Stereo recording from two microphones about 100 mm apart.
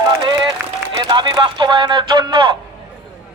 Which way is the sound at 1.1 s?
50° right (ahead or behind).